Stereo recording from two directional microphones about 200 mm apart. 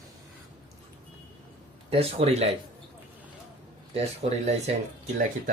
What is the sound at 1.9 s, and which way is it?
Speech, 30° right (ahead or behind).